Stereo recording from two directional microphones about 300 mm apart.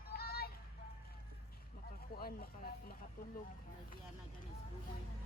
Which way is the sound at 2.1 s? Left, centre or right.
Left.